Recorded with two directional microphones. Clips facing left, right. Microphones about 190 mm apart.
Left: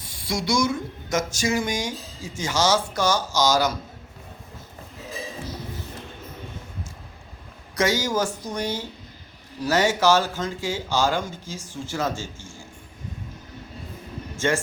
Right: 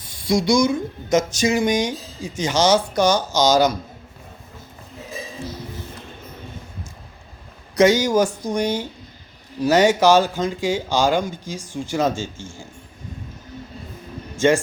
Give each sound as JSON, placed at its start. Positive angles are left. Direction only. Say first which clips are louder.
{"t": 0.3, "sound": "speech", "louder": "right 6 dB", "side_deg": -20}
{"t": 7.8, "sound": "speech", "louder": "right 7 dB", "side_deg": -20}
{"t": 14.3, "sound": "speech", "louder": "right 7 dB", "side_deg": -15}